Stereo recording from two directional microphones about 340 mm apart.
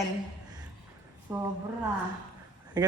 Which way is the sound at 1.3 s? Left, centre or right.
Centre.